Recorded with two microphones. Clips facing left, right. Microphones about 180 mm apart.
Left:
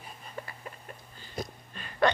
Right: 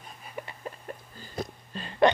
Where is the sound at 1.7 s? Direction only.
25° right (ahead or behind).